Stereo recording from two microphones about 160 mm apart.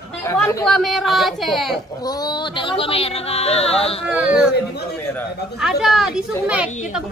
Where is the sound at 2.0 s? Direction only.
25° left (ahead or behind).